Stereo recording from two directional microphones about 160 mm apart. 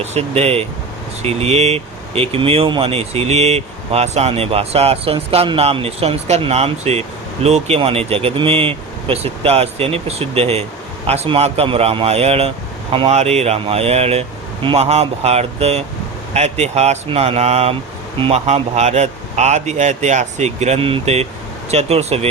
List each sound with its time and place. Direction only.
0.0 s speech: 40° right (ahead or behind)